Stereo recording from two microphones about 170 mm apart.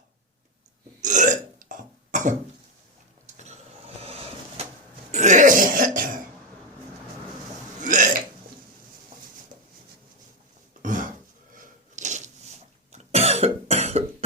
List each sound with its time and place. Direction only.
1.0 s burping: 45° right (ahead or behind)
3.2 s sewing machine: 45° right (ahead or behind)
5.1 s throat clearing: 45° right (ahead or behind)
7.8 s burping: 50° right (ahead or behind)
10.8 s throat clearing: 50° right (ahead or behind)
11.5 s a sound: 50° right (ahead or behind)
12.9 s cough: 40° right (ahead or behind)